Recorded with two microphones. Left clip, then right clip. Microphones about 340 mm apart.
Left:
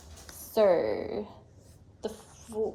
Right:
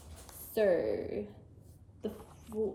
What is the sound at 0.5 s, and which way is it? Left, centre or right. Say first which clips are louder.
Speech: left 6 dB; left.